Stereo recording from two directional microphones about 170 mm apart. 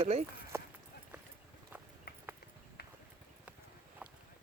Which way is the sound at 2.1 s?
70° left (ahead or behind).